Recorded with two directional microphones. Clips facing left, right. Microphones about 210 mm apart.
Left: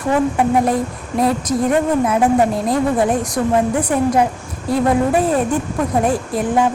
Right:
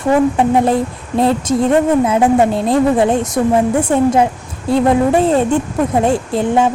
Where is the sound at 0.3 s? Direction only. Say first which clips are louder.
Right 3 dB; 25° right (ahead or behind).